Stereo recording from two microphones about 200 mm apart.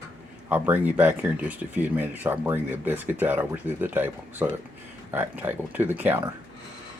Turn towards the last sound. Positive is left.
turn(degrees=-10)  # may be behind; listen again after turning